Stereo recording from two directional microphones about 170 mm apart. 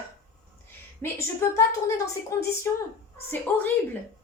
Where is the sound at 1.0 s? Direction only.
15° left (ahead or behind).